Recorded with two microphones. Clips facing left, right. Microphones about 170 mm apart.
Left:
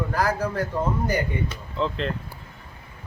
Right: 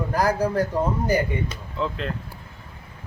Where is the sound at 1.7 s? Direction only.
5° right (ahead or behind).